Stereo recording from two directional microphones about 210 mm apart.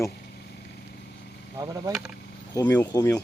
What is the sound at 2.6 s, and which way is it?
Speech, 15° left (ahead or behind).